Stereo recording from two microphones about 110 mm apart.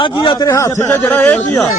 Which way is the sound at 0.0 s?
50° left (ahead or behind).